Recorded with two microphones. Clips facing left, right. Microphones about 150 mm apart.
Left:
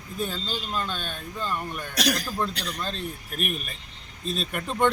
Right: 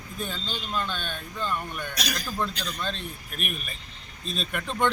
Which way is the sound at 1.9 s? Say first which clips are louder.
Left 11 dB; 80° left.